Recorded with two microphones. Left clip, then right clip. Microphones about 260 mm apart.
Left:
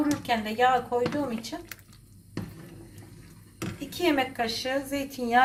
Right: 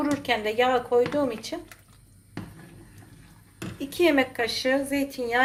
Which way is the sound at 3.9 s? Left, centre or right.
Right.